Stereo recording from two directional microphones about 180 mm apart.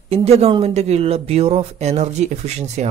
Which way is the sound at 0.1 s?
35° right (ahead or behind).